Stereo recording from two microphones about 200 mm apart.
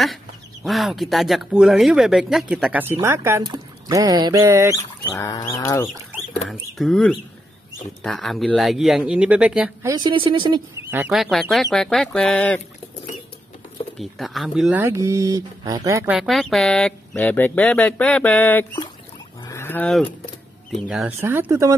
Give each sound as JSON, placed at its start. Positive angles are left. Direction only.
{"t": 0.7, "sound": "speech", "side_deg": 0}
{"t": 4.7, "sound": "chicken", "side_deg": 15}
{"t": 6.5, "sound": "speech", "side_deg": 0}
{"t": 9.8, "sound": "speech", "side_deg": -20}
{"t": 10.9, "sound": "speech", "side_deg": -5}
{"t": 13.9, "sound": "speech", "side_deg": 0}
{"t": 16.2, "sound": "speech", "side_deg": 0}
{"t": 19.4, "sound": "fowl", "side_deg": 15}
{"t": 21.2, "sound": "speech", "side_deg": -10}